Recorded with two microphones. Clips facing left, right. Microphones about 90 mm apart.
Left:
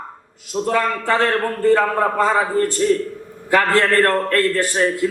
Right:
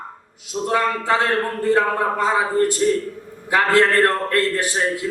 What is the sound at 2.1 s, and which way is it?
Speech, 15° right (ahead or behind).